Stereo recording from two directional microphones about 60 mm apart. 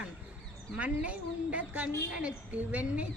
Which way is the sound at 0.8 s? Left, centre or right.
Right.